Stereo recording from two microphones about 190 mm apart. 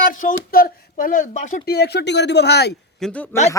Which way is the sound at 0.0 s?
45° left (ahead or behind).